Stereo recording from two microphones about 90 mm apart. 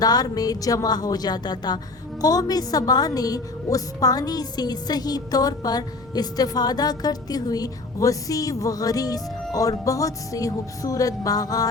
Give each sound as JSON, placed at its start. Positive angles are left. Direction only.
{"t": 0.0, "sound": "a woman's voice", "side_deg": 45}
{"t": 9.6, "sound": "music", "side_deg": 40}